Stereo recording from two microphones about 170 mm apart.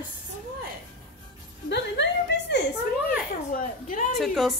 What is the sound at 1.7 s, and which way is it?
Speech, 90° left.